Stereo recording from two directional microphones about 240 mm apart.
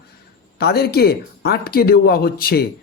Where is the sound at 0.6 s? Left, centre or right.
Left.